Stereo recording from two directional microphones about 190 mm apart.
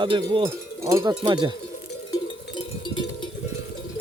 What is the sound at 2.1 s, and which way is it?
Cowbell, 25° left (ahead or behind).